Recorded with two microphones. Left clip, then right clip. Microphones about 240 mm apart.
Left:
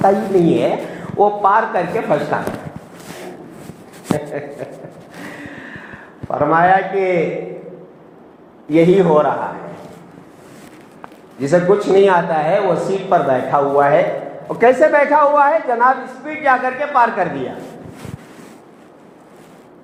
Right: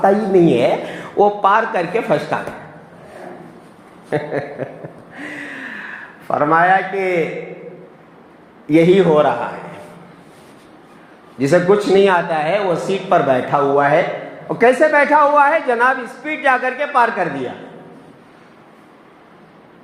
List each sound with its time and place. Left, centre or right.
0.0 s a man's voice: right
4.6 s speech: right
6.2 s a man's voice: right
8.7 s a man's voice: right
11.3 s a man's voice: right